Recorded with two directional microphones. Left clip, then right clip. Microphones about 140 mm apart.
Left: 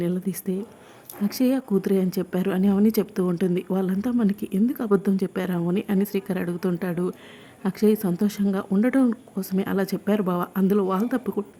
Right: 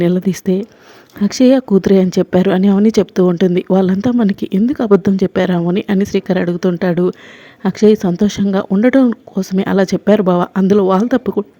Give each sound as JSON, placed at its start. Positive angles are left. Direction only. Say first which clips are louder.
{"t": 0.0, "sound": "speech", "louder": "right 13 dB", "side_deg": -50}